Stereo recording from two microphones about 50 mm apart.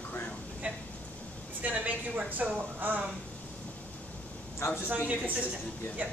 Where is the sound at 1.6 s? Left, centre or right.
Right.